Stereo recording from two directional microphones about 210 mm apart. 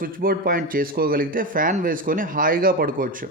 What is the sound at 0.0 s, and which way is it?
A man's voice, 45° right (ahead or behind).